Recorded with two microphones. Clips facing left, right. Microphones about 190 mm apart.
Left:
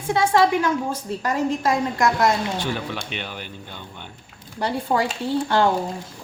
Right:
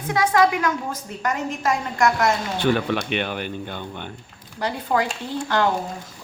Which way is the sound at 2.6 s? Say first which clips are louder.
Right 7 dB; 65° right (ahead or behind).